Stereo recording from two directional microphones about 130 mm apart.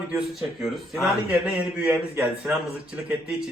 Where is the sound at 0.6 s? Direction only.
Centre (ahead or behind).